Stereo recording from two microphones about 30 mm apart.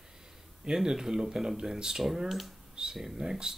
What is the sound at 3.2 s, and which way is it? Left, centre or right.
Speech, centre.